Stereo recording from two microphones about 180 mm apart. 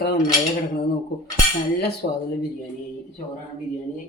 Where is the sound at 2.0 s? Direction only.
60° left (ahead or behind).